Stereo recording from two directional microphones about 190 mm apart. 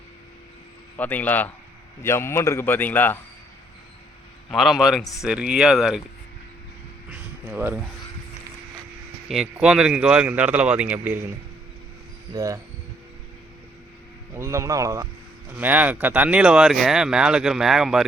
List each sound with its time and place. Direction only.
0.9 s a man's voice: 10° left (ahead or behind)
4.5 s speech: centre (ahead or behind)
7.1 s a sound: 10° right (ahead or behind)
9.3 s speech: 5° right (ahead or behind)
12.3 s speech: 15° right (ahead or behind)
14.3 s speech: 15° right (ahead or behind)